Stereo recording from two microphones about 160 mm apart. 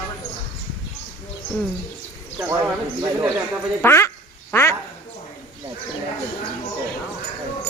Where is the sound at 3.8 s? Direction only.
15° left (ahead or behind).